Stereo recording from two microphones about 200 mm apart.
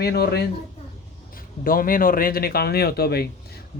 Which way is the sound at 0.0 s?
55° left (ahead or behind).